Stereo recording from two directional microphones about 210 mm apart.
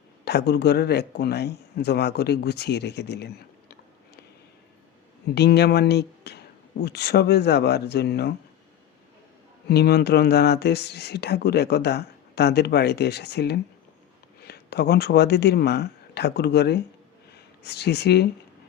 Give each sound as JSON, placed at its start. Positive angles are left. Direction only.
{"t": 0.3, "sound": "speech", "side_deg": 50}
{"t": 5.3, "sound": "speech", "side_deg": 50}
{"t": 9.6, "sound": "speech", "side_deg": 50}